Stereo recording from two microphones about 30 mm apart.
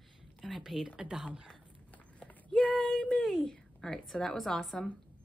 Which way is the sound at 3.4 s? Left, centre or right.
Centre.